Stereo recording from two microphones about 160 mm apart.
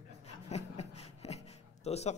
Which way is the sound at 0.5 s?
40° left (ahead or behind).